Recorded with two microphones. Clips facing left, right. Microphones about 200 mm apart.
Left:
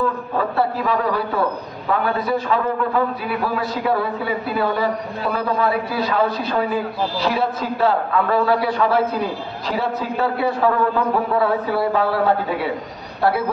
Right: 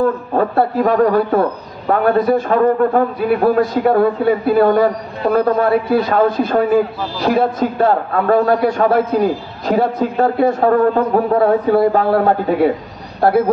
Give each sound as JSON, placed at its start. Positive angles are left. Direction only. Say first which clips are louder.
{"t": 0.4, "sound": "a man's voice", "louder": "right 6 dB", "side_deg": -50}